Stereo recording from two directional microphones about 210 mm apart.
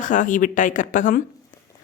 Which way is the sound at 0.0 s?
40° left (ahead or behind).